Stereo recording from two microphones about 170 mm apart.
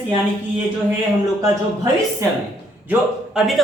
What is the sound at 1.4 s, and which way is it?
Speech, 20° right (ahead or behind).